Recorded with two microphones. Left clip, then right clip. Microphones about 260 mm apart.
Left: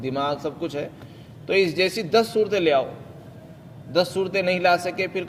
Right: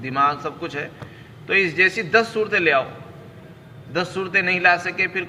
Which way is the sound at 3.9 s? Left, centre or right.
Left.